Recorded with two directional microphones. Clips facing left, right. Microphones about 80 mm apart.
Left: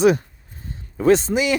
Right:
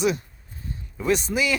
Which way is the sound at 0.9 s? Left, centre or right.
Left.